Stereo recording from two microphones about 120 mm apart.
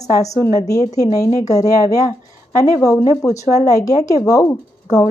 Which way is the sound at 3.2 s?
25° left (ahead or behind).